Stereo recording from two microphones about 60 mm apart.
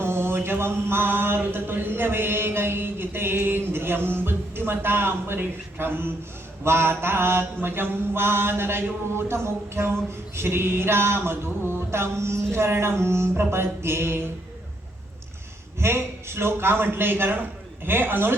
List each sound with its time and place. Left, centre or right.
0.0 s mantra: right
10.3 s a sound: right
15.8 s mantra: right